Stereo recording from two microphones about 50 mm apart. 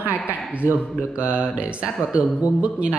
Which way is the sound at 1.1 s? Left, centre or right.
Right.